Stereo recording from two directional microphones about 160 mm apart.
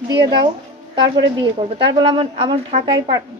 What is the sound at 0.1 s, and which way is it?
A woman's voice, 25° right (ahead or behind).